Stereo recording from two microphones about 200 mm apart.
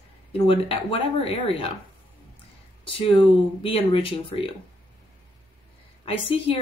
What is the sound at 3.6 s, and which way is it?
Speech, 25° left (ahead or behind).